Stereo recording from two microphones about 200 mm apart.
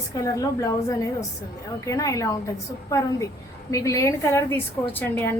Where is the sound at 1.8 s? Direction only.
15° left (ahead or behind).